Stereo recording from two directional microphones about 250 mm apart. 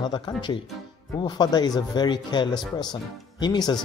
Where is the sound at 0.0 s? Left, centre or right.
Centre.